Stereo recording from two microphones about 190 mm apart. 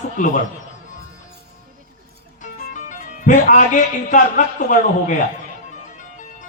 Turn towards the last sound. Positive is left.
turn(degrees=40)  # may be behind; listen again after turning